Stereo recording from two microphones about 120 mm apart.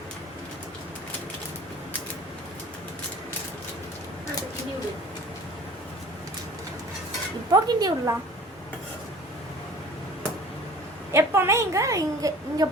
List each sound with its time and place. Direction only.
7.5 s speech: 35° right (ahead or behind)
11.1 s a woman's voice: 20° right (ahead or behind)